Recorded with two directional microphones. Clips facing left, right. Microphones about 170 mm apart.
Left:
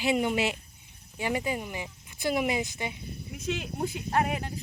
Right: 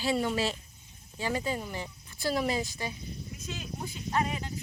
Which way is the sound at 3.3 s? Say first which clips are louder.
Left 9 dB; 65° left (ahead or behind).